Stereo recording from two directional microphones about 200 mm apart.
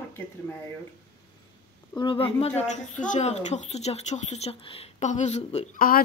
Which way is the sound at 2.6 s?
40° left (ahead or behind).